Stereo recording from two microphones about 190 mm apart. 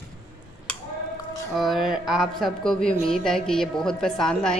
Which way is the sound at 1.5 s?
Centre (ahead or behind).